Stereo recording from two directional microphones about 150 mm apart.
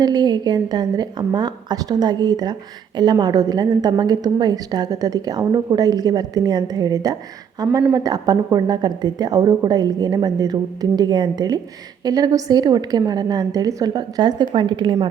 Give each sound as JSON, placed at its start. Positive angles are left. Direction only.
{"t": 0.0, "sound": "a woman's voice", "side_deg": -30}